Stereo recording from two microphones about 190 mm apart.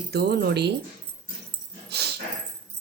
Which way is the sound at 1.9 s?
60° right (ahead or behind).